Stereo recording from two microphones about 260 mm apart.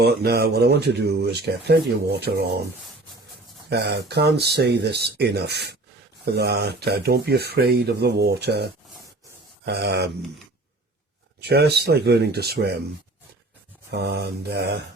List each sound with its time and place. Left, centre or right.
0.0 s speech: right
3.7 s speech: right
11.4 s speech: right
13.9 s speech: right